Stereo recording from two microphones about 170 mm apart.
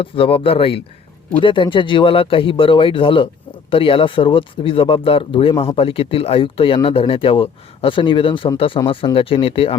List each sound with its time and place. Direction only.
0.0 s speech: 30° left (ahead or behind)